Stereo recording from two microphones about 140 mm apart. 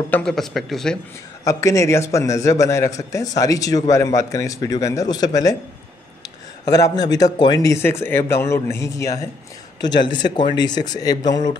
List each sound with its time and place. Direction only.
0.1 s speech: 5° left (ahead or behind)
1.4 s a man's voice: 25° left (ahead or behind)
6.6 s a man's voice: 25° left (ahead or behind)